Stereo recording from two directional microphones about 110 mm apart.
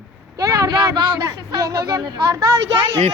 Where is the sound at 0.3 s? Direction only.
35° right (ahead or behind).